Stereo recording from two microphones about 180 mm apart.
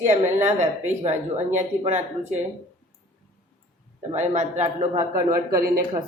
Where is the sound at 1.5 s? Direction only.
40° right (ahead or behind).